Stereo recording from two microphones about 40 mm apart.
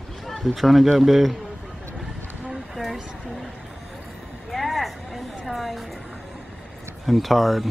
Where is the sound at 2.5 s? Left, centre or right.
Centre.